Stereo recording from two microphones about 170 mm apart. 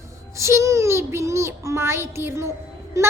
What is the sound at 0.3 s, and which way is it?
A woman's voice, 15° right (ahead or behind).